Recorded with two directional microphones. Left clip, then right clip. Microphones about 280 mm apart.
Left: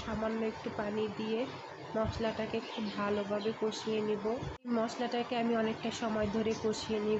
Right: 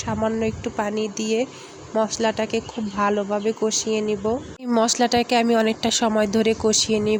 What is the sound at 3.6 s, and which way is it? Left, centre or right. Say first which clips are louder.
Speech: right 11 dB; right.